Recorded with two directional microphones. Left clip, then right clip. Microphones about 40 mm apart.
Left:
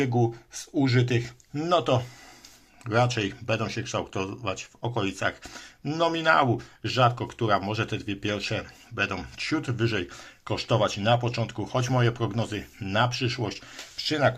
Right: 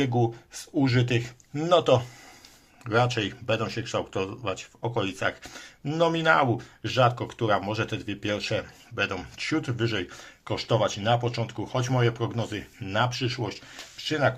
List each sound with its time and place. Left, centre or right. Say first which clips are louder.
0.0 s speech: even; centre
2.8 s speech: even; centre
5.0 s speech: even; left
6.5 s speech: even; centre
8.6 s speech: even; left